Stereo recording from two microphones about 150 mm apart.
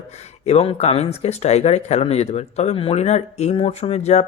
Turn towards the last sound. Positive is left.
turn(degrees=45)  # may be behind; listen again after turning